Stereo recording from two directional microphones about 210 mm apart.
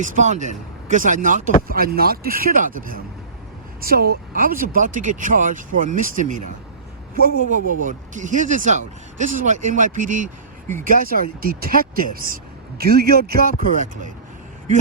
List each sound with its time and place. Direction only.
0.0 s speech: 35° right (ahead or behind)